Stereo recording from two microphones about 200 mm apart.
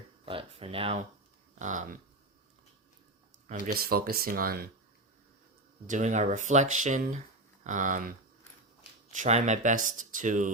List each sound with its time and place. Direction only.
0.3 s speech: 30° right (ahead or behind)
1.5 s speech: 40° right (ahead or behind)
3.8 s speech: 50° right (ahead or behind)
5.8 s speech: 35° right (ahead or behind)